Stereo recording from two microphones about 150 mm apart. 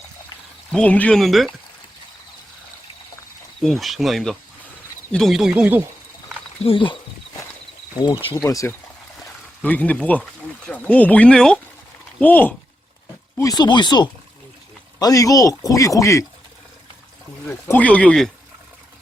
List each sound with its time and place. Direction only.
0.7 s speech: 10° left (ahead or behind)
3.6 s speech: centre (ahead or behind)
6.7 s speech: 35° left (ahead or behind)
8.4 s speech: 20° left (ahead or behind)
9.6 s speech: 10° left (ahead or behind)
13.3 s speech: 25° left (ahead or behind)
17.5 s speech: 15° left (ahead or behind)